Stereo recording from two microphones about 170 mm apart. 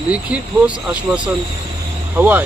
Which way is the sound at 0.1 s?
5° right (ahead or behind).